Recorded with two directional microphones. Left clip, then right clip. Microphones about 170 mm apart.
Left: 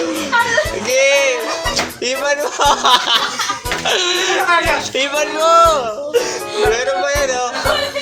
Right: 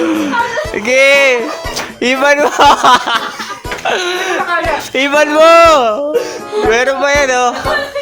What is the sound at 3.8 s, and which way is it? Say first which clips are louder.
Speech: right 2 dB; 25° right (ahead or behind).